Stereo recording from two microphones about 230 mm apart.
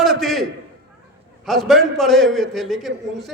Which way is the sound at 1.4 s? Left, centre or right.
Centre.